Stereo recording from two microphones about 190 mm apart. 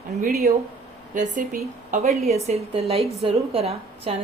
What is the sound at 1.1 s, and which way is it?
Speech, 45° right (ahead or behind).